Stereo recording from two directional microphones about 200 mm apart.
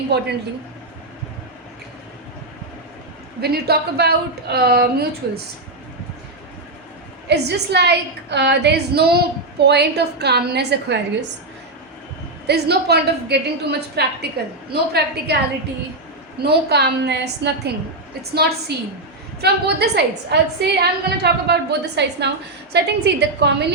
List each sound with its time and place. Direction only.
0.1 s a woman's voice: 55° right (ahead or behind)
3.4 s a woman's voice: 50° right (ahead or behind)
7.3 s a woman's voice: 55° right (ahead or behind)
12.5 s a woman's voice: 55° right (ahead or behind)
16.4 s a woman's voice: 55° right (ahead or behind)